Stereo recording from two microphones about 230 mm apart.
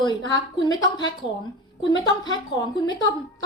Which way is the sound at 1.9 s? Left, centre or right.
Centre.